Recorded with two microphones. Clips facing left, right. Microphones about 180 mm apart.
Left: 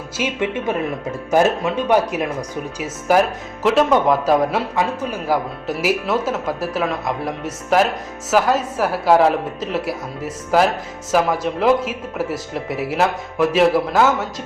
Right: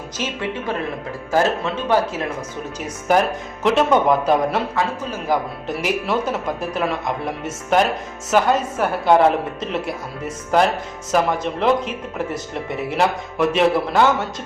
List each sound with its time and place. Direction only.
0.2 s speech: 20° left (ahead or behind)
2.8 s speech: 5° left (ahead or behind)